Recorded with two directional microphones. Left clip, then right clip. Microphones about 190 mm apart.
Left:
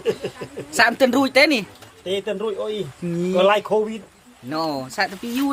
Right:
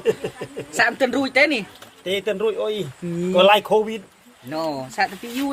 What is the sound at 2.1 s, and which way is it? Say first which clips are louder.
Speech: right 2 dB; 25° right (ahead or behind).